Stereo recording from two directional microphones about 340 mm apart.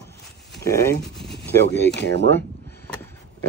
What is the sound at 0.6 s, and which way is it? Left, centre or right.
Speech, centre.